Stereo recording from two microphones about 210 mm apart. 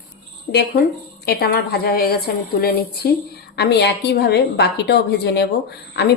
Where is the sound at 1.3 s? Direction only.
45° left (ahead or behind).